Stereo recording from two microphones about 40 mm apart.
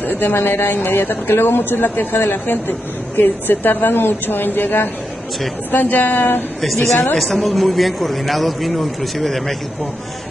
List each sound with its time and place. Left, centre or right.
0.0 s speech: left
6.6 s a man's voice: centre